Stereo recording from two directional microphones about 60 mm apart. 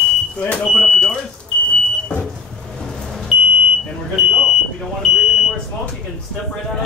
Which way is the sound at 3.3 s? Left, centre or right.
Centre.